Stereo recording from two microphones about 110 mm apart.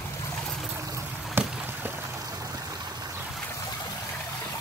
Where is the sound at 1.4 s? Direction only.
20° right (ahead or behind).